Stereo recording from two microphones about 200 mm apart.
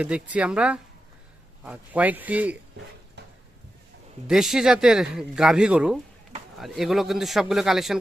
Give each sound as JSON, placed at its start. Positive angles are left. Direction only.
{"t": 0.0, "sound": "speech", "side_deg": -5}
{"t": 3.2, "sound": "a sound", "side_deg": -60}
{"t": 4.3, "sound": "speech", "side_deg": 0}